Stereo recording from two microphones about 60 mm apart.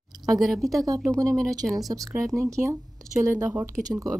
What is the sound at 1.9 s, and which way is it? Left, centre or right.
Speech, right.